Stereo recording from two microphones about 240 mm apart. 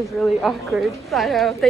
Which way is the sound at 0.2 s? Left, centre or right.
Centre.